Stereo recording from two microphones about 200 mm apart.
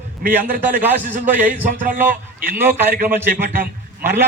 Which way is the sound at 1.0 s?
40° right (ahead or behind).